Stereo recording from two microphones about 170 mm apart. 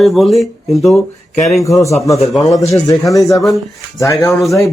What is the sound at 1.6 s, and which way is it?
Speech, 20° left (ahead or behind).